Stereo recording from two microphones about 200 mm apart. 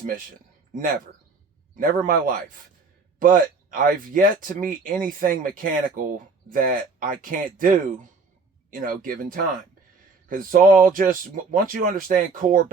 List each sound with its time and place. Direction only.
0.7 s speech: 40° right (ahead or behind)